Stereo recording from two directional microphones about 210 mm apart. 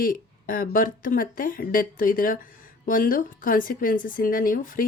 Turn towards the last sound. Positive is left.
turn(degrees=40)  # may be behind; listen again after turning